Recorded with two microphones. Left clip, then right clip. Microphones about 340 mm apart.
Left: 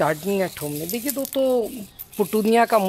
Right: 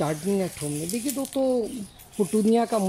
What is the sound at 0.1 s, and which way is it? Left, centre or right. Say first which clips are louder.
Speech: left 4 dB; left.